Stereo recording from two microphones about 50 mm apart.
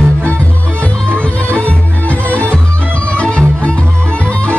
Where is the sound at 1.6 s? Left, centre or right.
Left.